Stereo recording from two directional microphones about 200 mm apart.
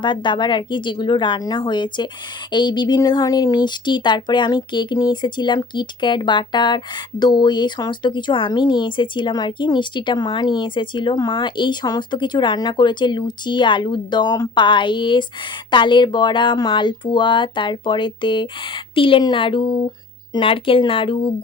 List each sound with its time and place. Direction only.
0.0 s speech: 25° left (ahead or behind)